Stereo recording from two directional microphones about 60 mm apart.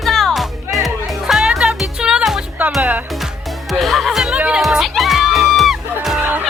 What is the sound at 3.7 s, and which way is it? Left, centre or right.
Music, centre.